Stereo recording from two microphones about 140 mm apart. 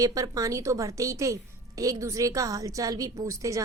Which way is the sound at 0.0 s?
25° right (ahead or behind).